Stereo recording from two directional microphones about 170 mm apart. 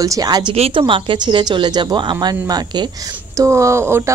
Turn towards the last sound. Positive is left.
turn(degrees=-15)  # may be behind; listen again after turning